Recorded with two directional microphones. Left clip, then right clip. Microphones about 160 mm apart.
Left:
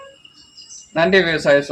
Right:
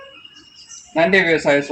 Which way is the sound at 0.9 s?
15° left (ahead or behind).